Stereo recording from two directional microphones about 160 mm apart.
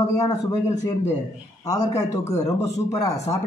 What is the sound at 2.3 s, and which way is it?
A man's voice, 20° left (ahead or behind).